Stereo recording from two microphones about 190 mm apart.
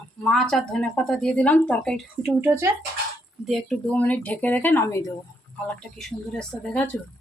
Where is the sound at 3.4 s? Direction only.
Centre (ahead or behind).